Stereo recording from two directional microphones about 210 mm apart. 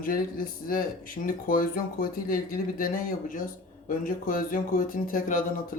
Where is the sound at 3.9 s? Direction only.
40° left (ahead or behind).